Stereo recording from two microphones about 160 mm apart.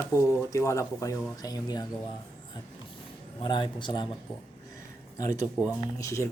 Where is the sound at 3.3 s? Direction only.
30° left (ahead or behind).